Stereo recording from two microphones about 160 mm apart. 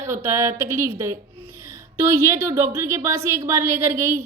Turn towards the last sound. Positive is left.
turn(degrees=-15)  # may be behind; listen again after turning